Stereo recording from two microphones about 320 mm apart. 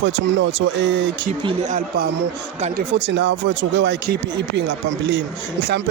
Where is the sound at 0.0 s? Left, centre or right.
Right.